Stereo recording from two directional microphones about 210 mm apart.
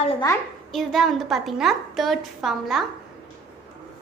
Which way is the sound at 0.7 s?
Centre (ahead or behind).